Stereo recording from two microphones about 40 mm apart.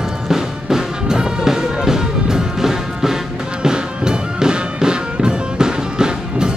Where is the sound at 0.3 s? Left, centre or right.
Centre.